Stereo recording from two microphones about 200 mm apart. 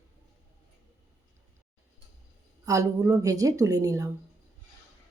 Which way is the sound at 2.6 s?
15° right (ahead or behind).